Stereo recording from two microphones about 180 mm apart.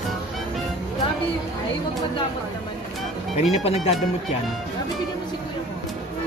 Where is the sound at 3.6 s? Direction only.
35° left (ahead or behind).